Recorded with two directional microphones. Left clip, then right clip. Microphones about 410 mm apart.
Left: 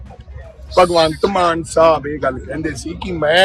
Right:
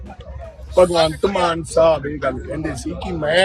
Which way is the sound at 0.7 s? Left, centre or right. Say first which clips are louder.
Left 2 dB; centre.